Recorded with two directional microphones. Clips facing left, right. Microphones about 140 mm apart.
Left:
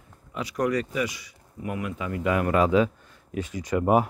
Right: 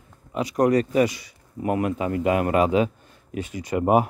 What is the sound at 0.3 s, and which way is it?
Speech, 20° right (ahead or behind).